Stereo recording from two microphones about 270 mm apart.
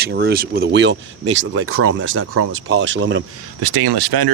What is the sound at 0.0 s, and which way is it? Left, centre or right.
Speech, right.